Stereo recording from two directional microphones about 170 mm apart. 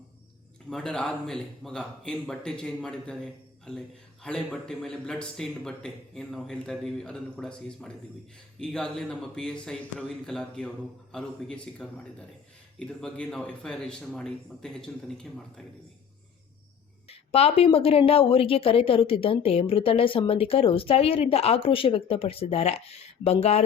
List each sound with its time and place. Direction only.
0.7 s speech: 5° left (ahead or behind)
17.1 s a woman's voice: 35° left (ahead or behind)